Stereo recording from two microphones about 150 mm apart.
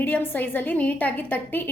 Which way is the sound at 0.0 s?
10° left (ahead or behind).